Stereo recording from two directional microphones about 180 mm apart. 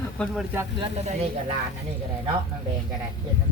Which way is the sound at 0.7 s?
30° right (ahead or behind).